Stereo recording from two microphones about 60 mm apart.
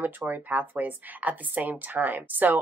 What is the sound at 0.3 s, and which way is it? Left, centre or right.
Speech, right.